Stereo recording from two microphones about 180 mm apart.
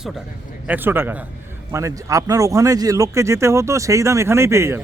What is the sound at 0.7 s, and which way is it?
Speech, 10° right (ahead or behind).